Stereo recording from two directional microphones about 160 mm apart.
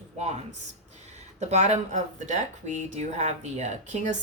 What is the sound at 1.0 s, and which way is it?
Speech, 45° right (ahead or behind).